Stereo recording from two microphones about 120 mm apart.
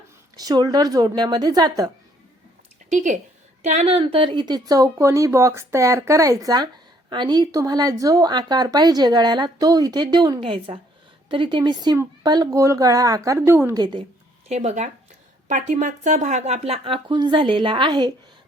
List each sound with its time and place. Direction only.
0.3 s speech: 30° right (ahead or behind)
2.9 s a woman's voice: 90° right
3.6 s speech: 65° right (ahead or behind); by 13.7 s 20° right (ahead or behind)
13.7 s speech: 35° right (ahead or behind)
14.4 s speech: 65° right (ahead or behind)
15.4 s speech: 90° right; by 18.1 s 40° right (ahead or behind)